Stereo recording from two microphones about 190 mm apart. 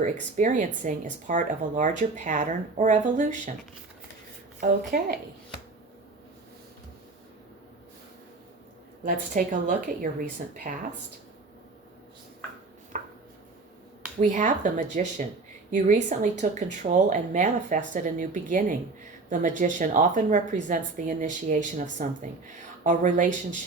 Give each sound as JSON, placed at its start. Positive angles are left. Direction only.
{"t": 0.0, "sound": "speech", "side_deg": -40}
{"t": 9.0, "sound": "speech", "side_deg": -45}
{"t": 12.9, "sound": "chopping", "side_deg": -40}
{"t": 14.2, "sound": "speech", "side_deg": -40}